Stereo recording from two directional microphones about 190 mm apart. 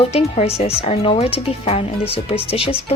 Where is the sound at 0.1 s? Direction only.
35° left (ahead or behind).